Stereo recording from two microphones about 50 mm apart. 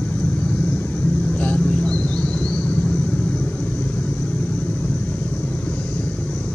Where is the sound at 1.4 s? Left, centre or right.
Left.